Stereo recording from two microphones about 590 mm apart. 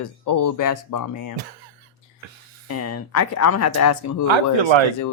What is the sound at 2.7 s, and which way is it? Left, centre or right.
Speech, left.